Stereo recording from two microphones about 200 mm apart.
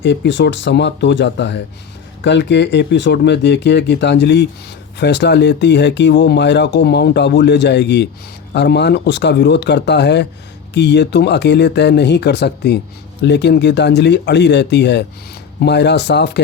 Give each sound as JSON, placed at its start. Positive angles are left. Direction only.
{"t": 0.0, "sound": "speech", "side_deg": 60}